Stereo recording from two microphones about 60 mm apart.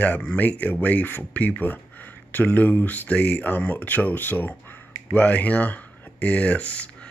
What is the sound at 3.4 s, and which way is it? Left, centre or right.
Speech, left.